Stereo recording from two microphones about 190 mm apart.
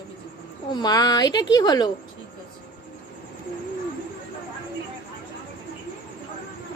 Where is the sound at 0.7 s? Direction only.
20° left (ahead or behind).